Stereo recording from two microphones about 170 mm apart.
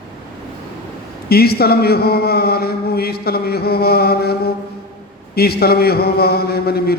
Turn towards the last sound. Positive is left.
turn(degrees=65)  # may be behind; listen again after turning